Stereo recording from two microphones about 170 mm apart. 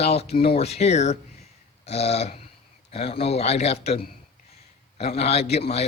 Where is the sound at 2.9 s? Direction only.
35° left (ahead or behind).